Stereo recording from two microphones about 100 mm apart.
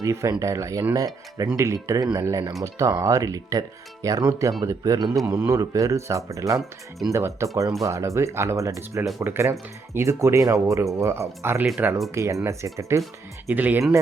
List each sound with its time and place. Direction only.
0.0 s speech: 30° right (ahead or behind)
12.1 s speech: 30° right (ahead or behind)
13.5 s speech: 15° right (ahead or behind)